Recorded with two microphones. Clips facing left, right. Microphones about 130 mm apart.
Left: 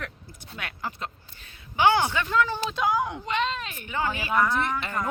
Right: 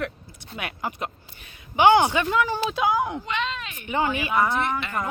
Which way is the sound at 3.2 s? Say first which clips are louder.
Left 1 dB; 40° left (ahead or behind).